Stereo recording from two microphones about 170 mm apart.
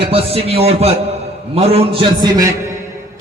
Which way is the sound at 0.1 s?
35° right (ahead or behind).